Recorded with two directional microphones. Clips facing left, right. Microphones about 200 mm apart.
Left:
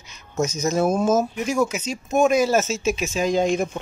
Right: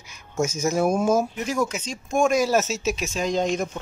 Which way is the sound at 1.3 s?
10° left (ahead or behind).